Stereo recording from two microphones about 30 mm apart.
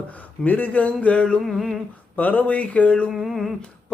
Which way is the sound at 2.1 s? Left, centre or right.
Left.